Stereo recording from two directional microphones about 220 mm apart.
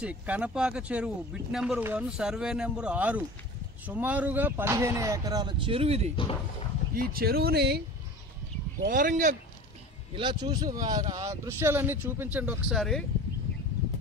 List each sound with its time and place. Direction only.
0.0 s speech: 5° right (ahead or behind); by 6.1 s 30° right (ahead or behind)
6.9 s speech: 40° right (ahead or behind)
8.8 s speech: 40° right (ahead or behind)
10.1 s speech: 20° right (ahead or behind); by 13.0 s centre (ahead or behind)